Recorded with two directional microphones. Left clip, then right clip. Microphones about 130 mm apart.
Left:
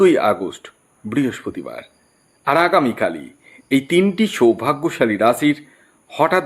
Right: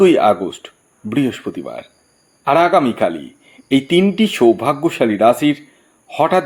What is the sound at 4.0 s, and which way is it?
Speech, 15° right (ahead or behind).